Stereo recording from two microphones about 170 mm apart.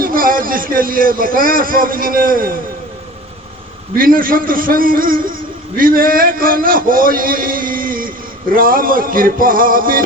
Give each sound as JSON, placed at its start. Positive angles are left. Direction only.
{"t": 0.0, "sound": "a man's voice", "side_deg": -55}
{"t": 3.9, "sound": "a man's voice", "side_deg": -55}